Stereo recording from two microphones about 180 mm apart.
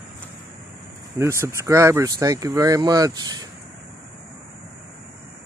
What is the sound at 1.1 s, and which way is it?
Speech, 15° right (ahead or behind).